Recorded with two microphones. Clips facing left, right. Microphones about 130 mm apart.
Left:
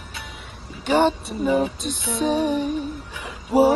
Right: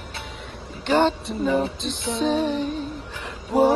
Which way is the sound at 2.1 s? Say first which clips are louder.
Left 1 dB; 10° left (ahead or behind).